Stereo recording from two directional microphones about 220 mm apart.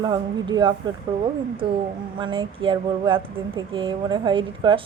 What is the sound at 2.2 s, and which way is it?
Speech, 20° right (ahead or behind).